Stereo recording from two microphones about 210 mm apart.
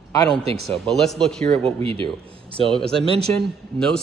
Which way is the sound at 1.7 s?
25° right (ahead or behind).